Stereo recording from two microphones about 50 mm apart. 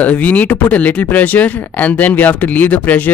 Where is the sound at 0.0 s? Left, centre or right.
Left.